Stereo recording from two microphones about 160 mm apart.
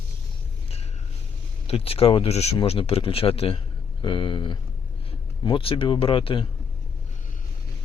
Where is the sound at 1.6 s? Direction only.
35° left (ahead or behind).